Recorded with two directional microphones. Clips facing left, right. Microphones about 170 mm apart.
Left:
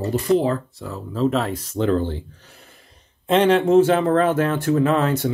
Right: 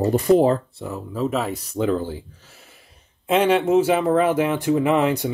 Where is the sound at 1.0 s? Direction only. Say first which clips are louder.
Left 3 dB; 10° right (ahead or behind).